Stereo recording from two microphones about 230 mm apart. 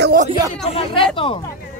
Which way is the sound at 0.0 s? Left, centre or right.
Right.